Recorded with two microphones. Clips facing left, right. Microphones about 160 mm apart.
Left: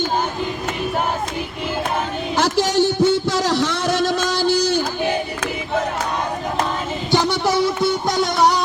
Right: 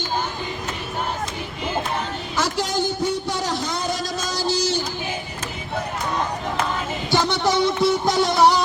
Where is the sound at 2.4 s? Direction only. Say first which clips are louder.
Left 6 dB; 80° left; by 5.1 s 55° left (ahead or behind).